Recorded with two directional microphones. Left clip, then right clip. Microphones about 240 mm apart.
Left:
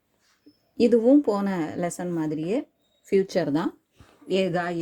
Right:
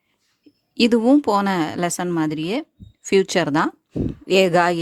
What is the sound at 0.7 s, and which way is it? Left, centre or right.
Speech, right.